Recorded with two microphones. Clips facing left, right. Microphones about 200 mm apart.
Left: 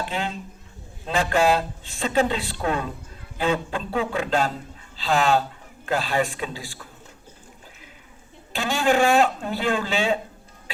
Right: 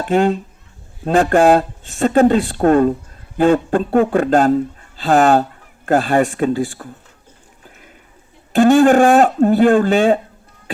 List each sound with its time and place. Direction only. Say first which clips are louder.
0.0 s speech: right 13 dB; 45° right (ahead or behind)
8.5 s speech: right 12 dB; 50° right (ahead or behind)